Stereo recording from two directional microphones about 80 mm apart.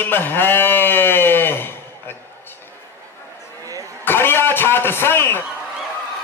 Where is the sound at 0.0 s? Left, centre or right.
Left.